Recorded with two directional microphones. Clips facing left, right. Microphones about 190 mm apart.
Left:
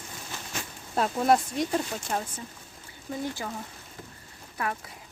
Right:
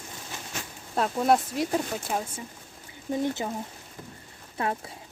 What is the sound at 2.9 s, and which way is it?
Speech, 20° right (ahead or behind).